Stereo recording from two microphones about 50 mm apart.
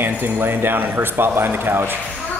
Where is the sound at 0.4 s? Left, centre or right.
Right.